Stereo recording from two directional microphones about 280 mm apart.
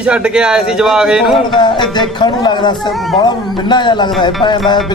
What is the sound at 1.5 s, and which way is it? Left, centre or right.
A man's voice, centre.